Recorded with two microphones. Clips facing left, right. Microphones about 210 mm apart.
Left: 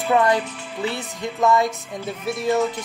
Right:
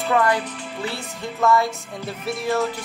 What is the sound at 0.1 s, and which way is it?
Music, 20° left (ahead or behind).